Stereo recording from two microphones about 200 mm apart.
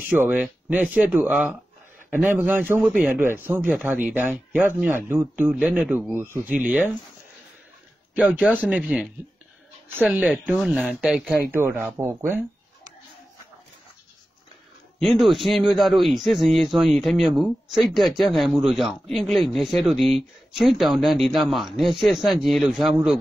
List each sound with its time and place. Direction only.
0.0 s speech: 10° right (ahead or behind)
8.1 s speech: 5° right (ahead or behind)
15.0 s speech: centre (ahead or behind)